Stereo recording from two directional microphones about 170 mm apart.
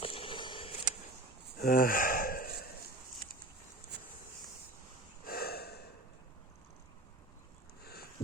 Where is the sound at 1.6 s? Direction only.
55° left (ahead or behind).